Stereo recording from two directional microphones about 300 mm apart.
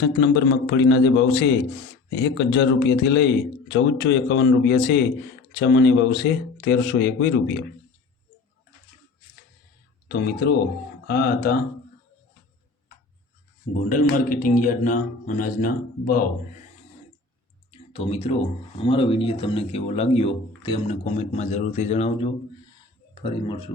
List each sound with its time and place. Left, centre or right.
0.0 s speech: left
10.1 s speech: left
13.8 s speech: left
17.7 s clicking: centre
18.8 s speech: centre